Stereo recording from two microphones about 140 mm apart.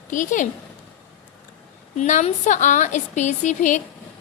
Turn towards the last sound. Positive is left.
turn(degrees=60)  # may be behind; listen again after turning